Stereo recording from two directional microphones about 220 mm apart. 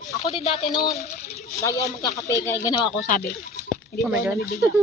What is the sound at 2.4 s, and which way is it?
Speech, 15° left (ahead or behind).